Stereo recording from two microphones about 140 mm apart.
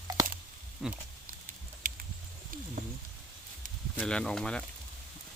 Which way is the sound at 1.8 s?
85° right.